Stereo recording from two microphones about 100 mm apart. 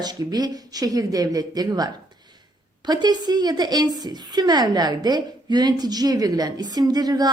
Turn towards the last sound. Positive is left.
turn(degrees=-40)  # may be behind; listen again after turning